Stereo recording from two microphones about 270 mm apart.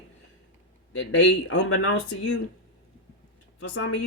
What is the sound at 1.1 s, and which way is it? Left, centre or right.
Speech, left.